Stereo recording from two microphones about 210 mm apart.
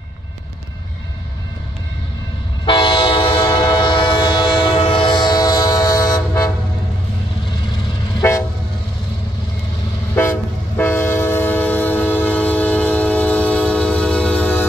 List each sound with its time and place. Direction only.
2.6 s train: 25° left (ahead or behind)
8.2 s vehicle: 15° left (ahead or behind)
10.8 s train: 10° left (ahead or behind)